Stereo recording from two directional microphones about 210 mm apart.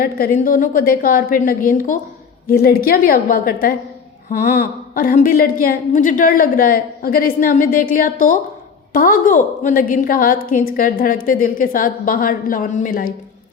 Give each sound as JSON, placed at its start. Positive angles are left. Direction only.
{"t": 0.0, "sound": "a woman's voice", "side_deg": 45}